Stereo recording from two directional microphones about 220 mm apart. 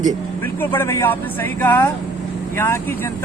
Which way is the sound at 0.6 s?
10° left (ahead or behind).